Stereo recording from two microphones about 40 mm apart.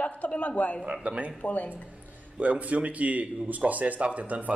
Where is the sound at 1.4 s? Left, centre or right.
Left.